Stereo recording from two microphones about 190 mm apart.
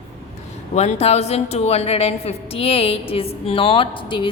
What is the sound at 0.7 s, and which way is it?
A woman's voice, 35° left (ahead or behind).